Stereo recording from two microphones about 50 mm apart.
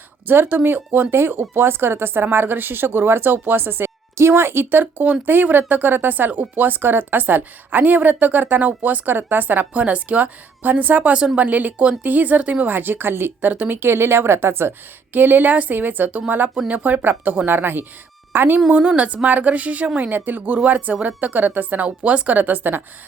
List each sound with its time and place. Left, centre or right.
0.3 s a woman's voice: right
14.7 s a woman's voice: right
18.7 s a woman's voice: right
20.1 s a woman's voice: right